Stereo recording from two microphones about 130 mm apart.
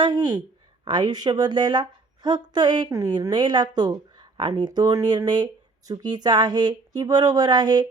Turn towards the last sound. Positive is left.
turn(degrees=-35)  # may be behind; listen again after turning